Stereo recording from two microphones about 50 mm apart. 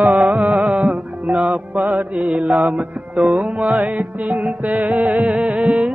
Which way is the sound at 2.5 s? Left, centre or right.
Right.